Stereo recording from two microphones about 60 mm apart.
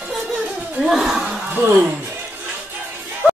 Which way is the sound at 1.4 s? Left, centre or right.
Right.